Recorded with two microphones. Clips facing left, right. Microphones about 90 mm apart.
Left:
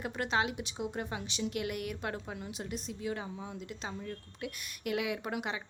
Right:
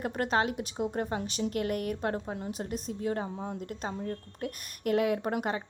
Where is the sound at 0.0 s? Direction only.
45° right (ahead or behind).